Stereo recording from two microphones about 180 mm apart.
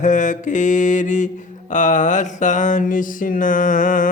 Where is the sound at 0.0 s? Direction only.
45° left (ahead or behind).